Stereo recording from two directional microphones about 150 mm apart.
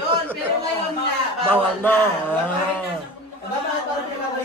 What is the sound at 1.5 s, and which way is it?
Speech, 10° left (ahead or behind).